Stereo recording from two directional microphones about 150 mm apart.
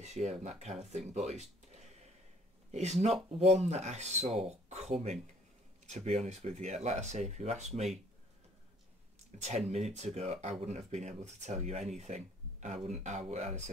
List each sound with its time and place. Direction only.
0.0 s speech: 45° right (ahead or behind)
9.4 s speech: 45° right (ahead or behind)